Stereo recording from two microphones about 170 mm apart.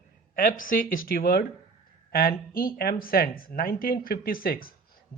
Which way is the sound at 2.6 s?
60° left (ahead or behind).